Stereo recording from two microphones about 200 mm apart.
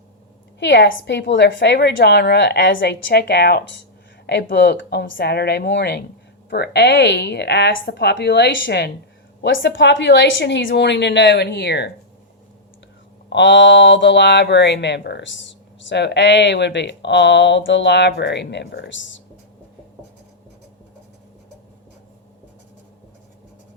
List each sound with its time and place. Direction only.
0.6 s speech: 60° left (ahead or behind)
13.3 s speech: 65° left (ahead or behind)